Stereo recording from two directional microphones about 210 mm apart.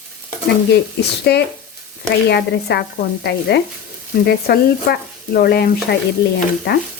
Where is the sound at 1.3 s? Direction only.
50° left (ahead or behind).